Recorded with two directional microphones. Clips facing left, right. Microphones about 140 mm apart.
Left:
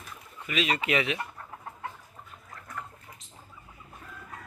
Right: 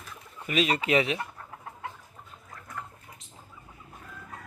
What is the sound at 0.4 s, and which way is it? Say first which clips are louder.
Speech: right 2 dB; 40° right (ahead or behind).